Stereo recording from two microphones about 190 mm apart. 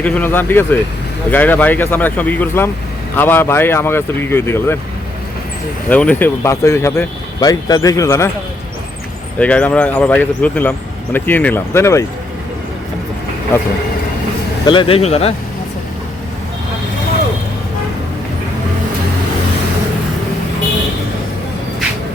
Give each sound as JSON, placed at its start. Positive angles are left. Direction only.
{"t": 0.0, "sound": "speech", "side_deg": 10}
{"t": 5.9, "sound": "speech", "side_deg": 5}
{"t": 9.4, "sound": "speech", "side_deg": 5}
{"t": 14.6, "sound": "speech", "side_deg": 25}